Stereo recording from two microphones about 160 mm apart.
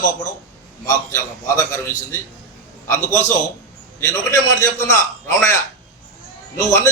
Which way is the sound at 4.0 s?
20° left (ahead or behind).